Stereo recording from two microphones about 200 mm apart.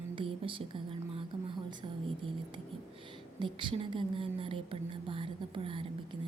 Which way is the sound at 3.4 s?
25° right (ahead or behind).